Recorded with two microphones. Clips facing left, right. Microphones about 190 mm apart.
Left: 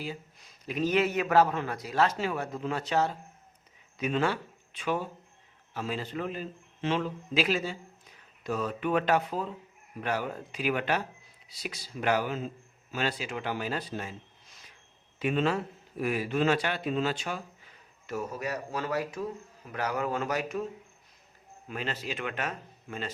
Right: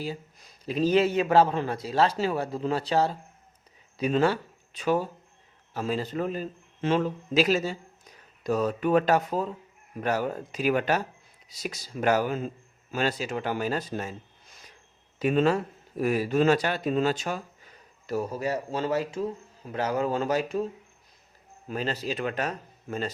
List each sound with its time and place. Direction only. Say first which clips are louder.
0.6 s speech: right 4 dB; 30° right (ahead or behind)
15.2 s speech: right 5 dB; 40° right (ahead or behind)
21.7 s speech: right 5 dB; 35° right (ahead or behind)